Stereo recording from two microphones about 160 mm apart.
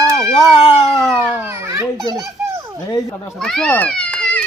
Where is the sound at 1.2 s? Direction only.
15° right (ahead or behind).